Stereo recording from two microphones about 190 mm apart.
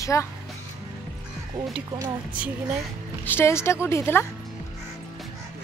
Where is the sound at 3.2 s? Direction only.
10° left (ahead or behind).